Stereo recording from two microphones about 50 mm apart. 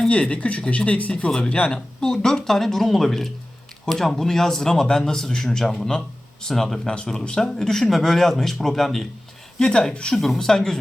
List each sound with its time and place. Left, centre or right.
0.1 s a man's voice: left
2.0 s speech: centre
9.6 s speech: centre
10.2 s speech: centre